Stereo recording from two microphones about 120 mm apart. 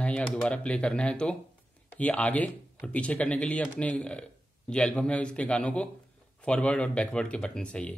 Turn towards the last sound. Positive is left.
turn(degrees=10)  # may be behind; listen again after turning